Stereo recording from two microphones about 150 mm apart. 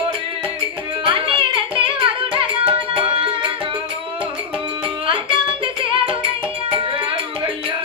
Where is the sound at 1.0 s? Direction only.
35° right (ahead or behind).